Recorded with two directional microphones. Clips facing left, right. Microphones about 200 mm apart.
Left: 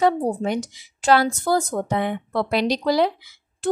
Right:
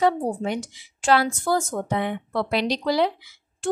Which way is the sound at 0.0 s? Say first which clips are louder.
Left 2 dB; 40° left (ahead or behind).